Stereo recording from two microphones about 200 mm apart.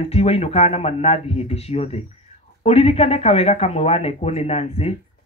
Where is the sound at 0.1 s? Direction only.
30° left (ahead or behind).